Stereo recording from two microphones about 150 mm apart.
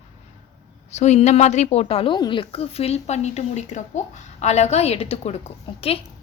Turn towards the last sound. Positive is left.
turn(degrees=40)  # may be behind; listen again after turning